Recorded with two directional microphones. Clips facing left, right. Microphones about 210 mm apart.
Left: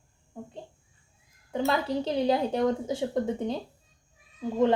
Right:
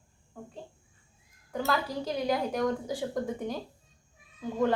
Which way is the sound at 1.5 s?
25° left (ahead or behind).